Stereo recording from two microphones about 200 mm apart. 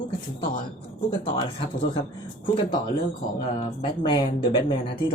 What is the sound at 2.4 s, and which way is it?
Speech, 25° left (ahead or behind).